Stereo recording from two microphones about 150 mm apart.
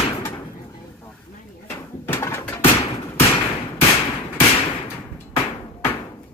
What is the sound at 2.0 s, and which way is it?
Pigeon, 15° left (ahead or behind).